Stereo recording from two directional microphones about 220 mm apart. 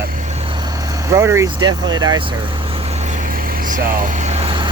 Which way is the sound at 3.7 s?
35° right (ahead or behind).